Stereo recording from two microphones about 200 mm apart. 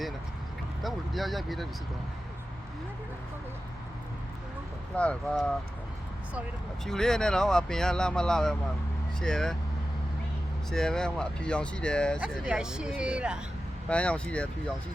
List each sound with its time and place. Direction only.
0.8 s speech: centre (ahead or behind)
4.9 s speech: 5° left (ahead or behind)
6.8 s speech: 5° left (ahead or behind)
10.7 s speech: 5° left (ahead or behind)
13.8 s speech: 5° left (ahead or behind)